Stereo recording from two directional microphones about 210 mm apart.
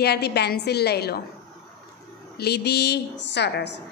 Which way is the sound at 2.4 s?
50° left (ahead or behind).